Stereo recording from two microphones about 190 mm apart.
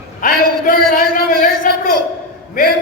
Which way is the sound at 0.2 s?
50° left (ahead or behind).